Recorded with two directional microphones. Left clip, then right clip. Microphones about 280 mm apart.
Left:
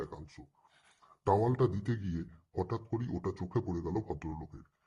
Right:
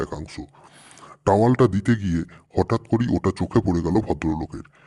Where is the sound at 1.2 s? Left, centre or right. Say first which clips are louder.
Right 12 dB; right.